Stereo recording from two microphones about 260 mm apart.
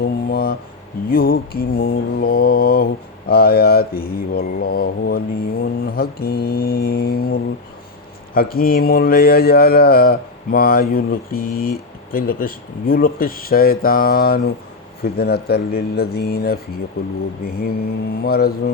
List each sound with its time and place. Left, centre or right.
0.0 s a sound: left
1.1 s mantra: left
18.2 s mantra: left